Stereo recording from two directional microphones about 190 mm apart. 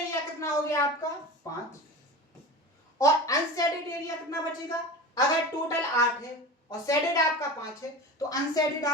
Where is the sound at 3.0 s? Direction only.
15° left (ahead or behind).